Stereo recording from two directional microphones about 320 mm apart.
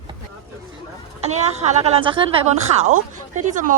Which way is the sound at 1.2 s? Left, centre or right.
Centre.